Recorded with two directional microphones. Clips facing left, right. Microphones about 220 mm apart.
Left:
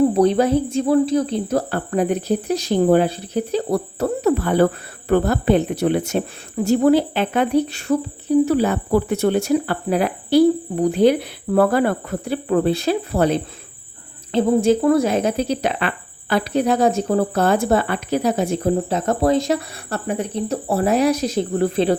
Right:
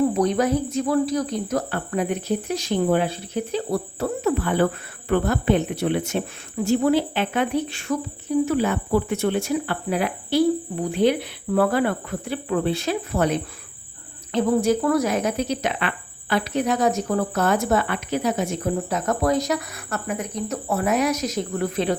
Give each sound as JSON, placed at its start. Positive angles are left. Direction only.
{"t": 0.1, "sound": "speech", "side_deg": 30}